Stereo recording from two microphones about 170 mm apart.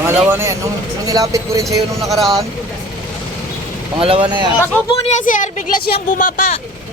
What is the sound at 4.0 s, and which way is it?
Speech, 30° right (ahead or behind).